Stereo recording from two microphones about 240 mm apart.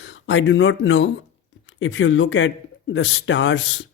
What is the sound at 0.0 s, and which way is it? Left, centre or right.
Speech, left.